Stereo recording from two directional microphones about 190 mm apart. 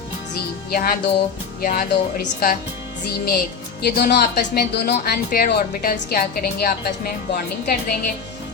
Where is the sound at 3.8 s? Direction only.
60° left (ahead or behind).